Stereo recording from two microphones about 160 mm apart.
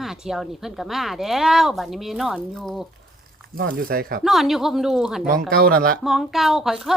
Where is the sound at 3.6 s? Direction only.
70° right (ahead or behind).